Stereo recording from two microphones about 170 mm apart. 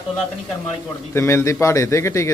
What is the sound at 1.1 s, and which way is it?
A man's voice, 15° left (ahead or behind).